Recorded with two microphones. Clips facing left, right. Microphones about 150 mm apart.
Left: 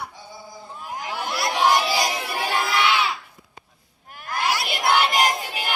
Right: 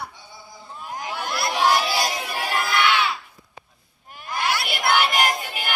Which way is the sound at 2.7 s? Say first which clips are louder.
Right 1 dB; 25° left (ahead or behind).